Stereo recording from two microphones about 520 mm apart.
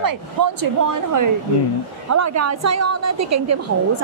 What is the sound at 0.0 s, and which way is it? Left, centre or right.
A woman's voice, right.